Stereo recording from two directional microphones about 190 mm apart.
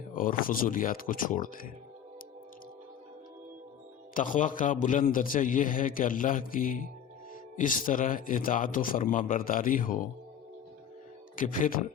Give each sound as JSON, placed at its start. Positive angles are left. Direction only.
{"t": 0.2, "sound": "a man's voice", "side_deg": 45}
{"t": 4.1, "sound": "a man's voice", "side_deg": 45}
{"t": 11.3, "sound": "a man's voice", "side_deg": 45}